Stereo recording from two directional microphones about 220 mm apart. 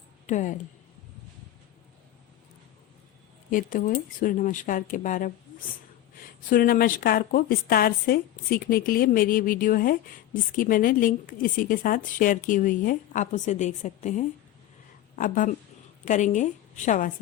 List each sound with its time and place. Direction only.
0.3 s a woman's voice: 35° left (ahead or behind)
3.5 s a woman's voice: 40° left (ahead or behind)
6.5 s a woman's voice: 40° left (ahead or behind)